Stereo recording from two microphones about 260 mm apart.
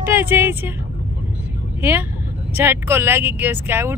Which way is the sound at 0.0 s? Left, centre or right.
Centre.